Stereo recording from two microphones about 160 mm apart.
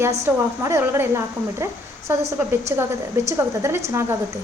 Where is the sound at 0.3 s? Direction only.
15° right (ahead or behind).